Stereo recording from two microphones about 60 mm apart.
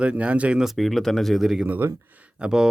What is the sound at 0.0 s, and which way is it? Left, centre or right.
Speech, right.